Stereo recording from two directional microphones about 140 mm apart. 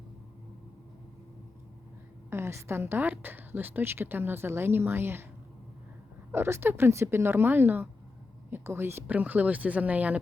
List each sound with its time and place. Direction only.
2.3 s a woman's voice: 20° right (ahead or behind)
6.3 s a woman's voice: 15° right (ahead or behind)